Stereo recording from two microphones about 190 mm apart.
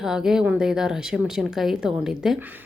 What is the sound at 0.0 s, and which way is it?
Speech, 5° right (ahead or behind).